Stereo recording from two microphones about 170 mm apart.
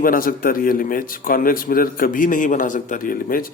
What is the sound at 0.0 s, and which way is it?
A man's voice, 55° left (ahead or behind).